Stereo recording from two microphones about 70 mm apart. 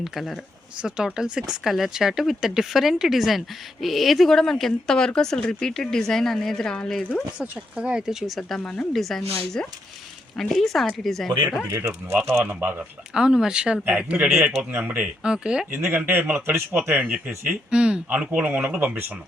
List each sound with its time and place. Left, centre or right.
0.0 s speech: centre
7.3 s a man's voice: right
7.8 s speech: centre
8.4 s speech: centre
10.3 s speech: centre
11.7 s speech: right
12.5 s a man's voice: right
13.1 s a man's voice: centre
15.3 s speech: centre
15.9 s a man's voice: right